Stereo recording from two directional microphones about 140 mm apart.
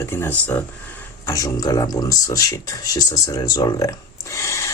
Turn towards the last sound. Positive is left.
turn(degrees=20)  # may be behind; listen again after turning